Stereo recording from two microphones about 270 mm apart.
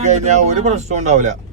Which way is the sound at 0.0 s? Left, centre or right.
Right.